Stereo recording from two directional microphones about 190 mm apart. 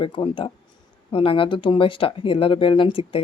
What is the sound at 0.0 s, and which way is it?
Speech, 25° left (ahead or behind).